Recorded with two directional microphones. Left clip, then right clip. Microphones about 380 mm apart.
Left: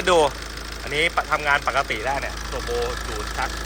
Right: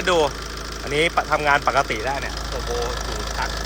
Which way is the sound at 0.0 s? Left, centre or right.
Centre.